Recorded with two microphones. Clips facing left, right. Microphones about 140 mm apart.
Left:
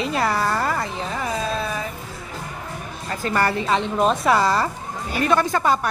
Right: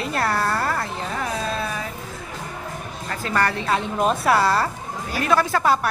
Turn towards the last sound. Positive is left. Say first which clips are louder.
# even
turn(degrees=-5)  # may be behind; listen again after turning